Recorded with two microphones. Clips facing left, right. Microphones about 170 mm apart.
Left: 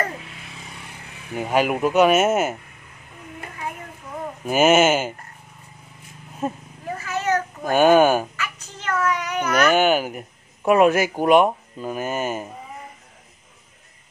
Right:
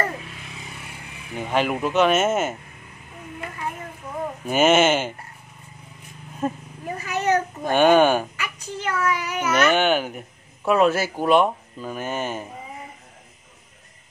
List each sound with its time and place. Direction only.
1.3 s speech: 10° left (ahead or behind)
4.5 s speech: 5° left (ahead or behind)
7.0 s cat: 15° right (ahead or behind)
7.7 s speech: 5° left (ahead or behind)
8.4 s a child's voice: 10° right (ahead or behind)
9.7 s speech: 5° left (ahead or behind)